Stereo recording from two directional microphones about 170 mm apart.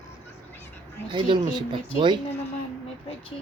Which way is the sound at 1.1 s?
25° right (ahead or behind).